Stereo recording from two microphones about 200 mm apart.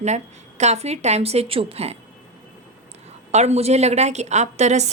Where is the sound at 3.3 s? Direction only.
35° right (ahead or behind).